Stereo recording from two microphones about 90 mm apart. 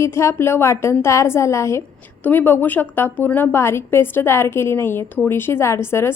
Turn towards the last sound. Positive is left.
turn(degrees=30)  # may be behind; listen again after turning